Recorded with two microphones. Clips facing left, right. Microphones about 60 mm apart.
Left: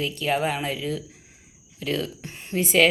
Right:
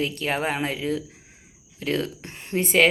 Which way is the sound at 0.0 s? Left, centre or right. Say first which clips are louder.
Left 1 dB; right.